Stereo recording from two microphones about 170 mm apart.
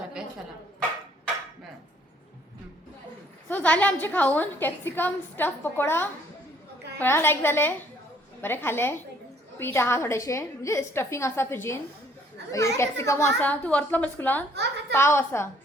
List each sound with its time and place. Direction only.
3.5 s a woman's voice: 10° left (ahead or behind)